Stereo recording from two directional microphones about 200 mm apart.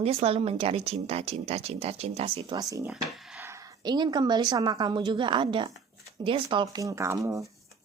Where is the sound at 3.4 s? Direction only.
15° right (ahead or behind).